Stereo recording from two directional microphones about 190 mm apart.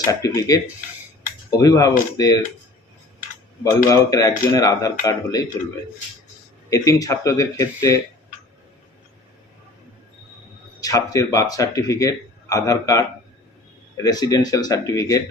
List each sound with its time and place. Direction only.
0.1 s speech: 20° left (ahead or behind)
3.6 s speech: 20° left (ahead or behind)
6.7 s speech: 15° left (ahead or behind)
10.8 s speech: 20° left (ahead or behind)